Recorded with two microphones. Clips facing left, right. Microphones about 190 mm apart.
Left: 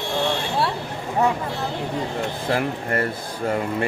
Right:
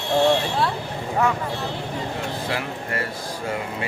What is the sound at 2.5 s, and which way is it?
Speech, 50° left (ahead or behind).